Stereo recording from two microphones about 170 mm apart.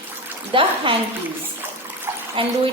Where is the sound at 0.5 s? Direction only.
30° right (ahead or behind).